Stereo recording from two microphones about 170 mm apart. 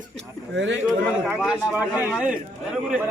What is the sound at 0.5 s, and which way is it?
Speech, 90° right.